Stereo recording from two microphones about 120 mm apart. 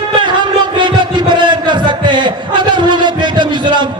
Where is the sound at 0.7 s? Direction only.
40° right (ahead or behind).